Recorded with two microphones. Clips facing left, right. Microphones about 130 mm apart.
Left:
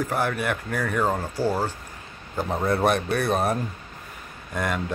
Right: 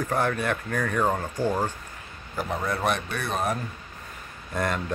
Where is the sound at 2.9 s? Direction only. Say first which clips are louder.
Left 5 dB; 40° left (ahead or behind).